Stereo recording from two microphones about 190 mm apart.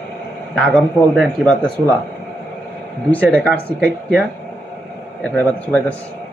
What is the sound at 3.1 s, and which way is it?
Speech, 5° left (ahead or behind).